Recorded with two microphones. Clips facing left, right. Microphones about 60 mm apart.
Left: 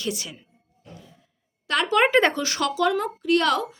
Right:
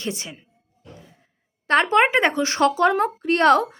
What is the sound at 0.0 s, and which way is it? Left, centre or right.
Speech, right.